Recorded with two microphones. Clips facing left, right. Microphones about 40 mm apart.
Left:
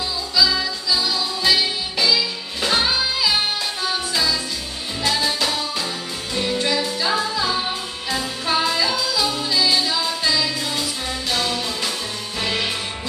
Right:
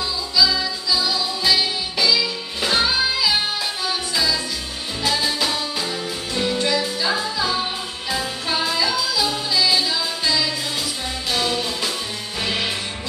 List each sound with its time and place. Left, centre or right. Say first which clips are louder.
0.4 s music: even; centre